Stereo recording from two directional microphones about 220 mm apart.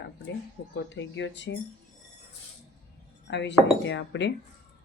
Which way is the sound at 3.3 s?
55° left (ahead or behind).